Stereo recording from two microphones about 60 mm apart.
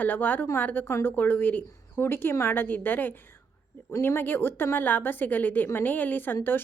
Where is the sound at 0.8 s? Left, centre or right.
Left.